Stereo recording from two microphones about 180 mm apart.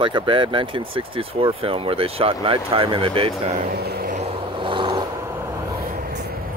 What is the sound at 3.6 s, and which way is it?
Speech, 60° right (ahead or behind).